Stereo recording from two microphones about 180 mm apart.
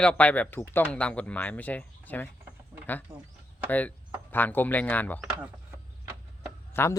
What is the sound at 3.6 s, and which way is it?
Speech, 10° left (ahead or behind).